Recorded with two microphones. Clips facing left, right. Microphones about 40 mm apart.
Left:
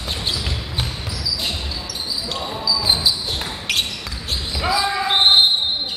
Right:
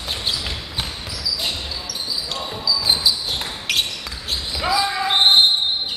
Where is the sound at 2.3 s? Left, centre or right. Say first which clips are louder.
Left 2 dB; centre.